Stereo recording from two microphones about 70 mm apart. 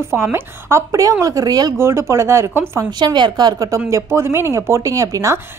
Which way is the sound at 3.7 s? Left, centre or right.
Right.